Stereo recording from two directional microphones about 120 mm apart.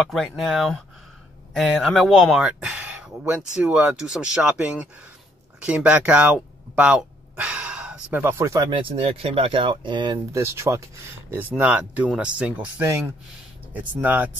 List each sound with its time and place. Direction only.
0.0 s speech: centre (ahead or behind)
5.6 s a sound: 10° right (ahead or behind)
8.5 s speech: 45° right (ahead or behind)
10.3 s speech: 20° right (ahead or behind)